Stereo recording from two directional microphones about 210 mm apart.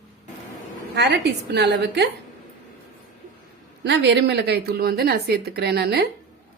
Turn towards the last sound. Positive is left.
turn(degrees=-50)  # may be behind; listen again after turning